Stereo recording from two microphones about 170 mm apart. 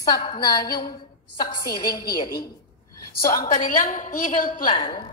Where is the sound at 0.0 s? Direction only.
25° left (ahead or behind).